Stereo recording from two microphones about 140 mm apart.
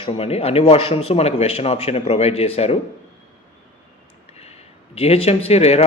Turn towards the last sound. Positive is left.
turn(degrees=50)  # may be behind; listen again after turning